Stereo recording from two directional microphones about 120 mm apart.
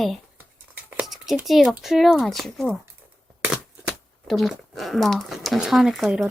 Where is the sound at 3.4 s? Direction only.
10° right (ahead or behind).